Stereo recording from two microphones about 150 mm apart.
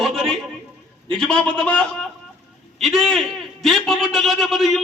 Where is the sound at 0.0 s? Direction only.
Centre (ahead or behind).